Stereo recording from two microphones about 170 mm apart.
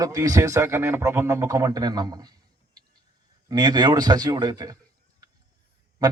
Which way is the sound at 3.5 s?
25° right (ahead or behind).